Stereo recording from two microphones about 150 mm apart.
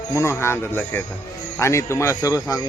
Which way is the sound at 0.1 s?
20° left (ahead or behind).